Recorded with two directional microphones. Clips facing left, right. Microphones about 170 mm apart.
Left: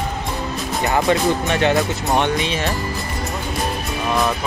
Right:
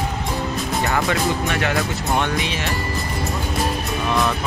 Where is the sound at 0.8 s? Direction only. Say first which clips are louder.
Left 5 dB; 25° left (ahead or behind).